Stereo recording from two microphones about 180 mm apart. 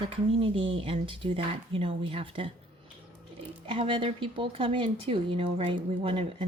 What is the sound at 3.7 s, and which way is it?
Speech, 30° right (ahead or behind).